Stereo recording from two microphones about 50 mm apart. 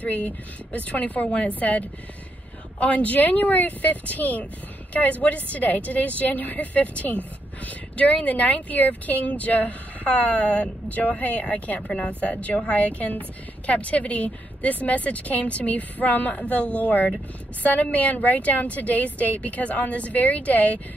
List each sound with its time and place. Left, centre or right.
0.0 s a woman's voice: left